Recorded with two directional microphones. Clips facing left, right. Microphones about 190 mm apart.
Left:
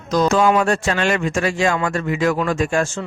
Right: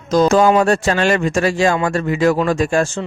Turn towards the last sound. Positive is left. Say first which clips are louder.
# right 3 dB
turn(degrees=-35)  # may be behind; listen again after turning